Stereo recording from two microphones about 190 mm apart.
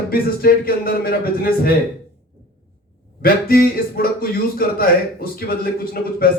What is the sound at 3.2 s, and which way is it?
Speech, 50° left (ahead or behind).